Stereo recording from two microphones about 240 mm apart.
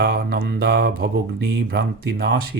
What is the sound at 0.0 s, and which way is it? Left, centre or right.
Speech, right.